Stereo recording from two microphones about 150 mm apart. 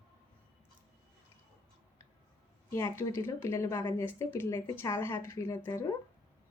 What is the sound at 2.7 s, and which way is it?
Speech, 15° left (ahead or behind).